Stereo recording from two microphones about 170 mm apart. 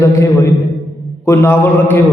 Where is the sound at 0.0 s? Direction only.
15° left (ahead or behind).